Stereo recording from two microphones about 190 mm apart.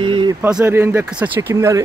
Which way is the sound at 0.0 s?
25° right (ahead or behind).